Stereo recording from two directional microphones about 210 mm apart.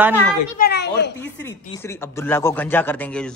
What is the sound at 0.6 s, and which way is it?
Children playing, 50° left (ahead or behind).